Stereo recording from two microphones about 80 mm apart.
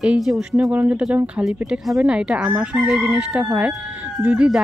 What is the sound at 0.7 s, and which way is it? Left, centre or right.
Speech, centre.